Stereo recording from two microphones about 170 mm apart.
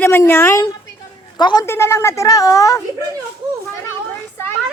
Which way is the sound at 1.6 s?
15° left (ahead or behind).